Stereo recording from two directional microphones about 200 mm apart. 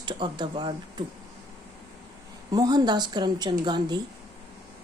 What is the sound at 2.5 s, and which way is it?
Speech, 20° right (ahead or behind).